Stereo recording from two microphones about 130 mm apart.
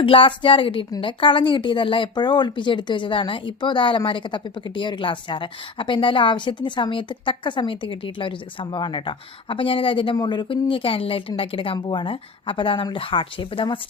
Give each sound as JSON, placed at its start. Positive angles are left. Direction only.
{"t": 0.0, "sound": "a woman's voice", "side_deg": 40}